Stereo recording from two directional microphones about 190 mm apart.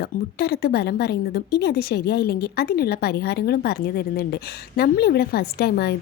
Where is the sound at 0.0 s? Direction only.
55° left (ahead or behind).